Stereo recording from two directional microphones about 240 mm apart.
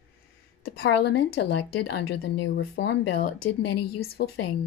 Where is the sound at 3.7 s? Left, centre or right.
Left.